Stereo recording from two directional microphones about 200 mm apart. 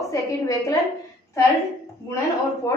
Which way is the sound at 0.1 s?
15° left (ahead or behind).